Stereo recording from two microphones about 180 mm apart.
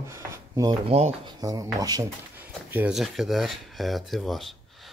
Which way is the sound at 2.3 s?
10° right (ahead or behind).